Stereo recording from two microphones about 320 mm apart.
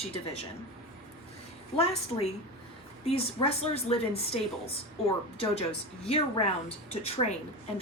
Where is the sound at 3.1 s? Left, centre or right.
Centre.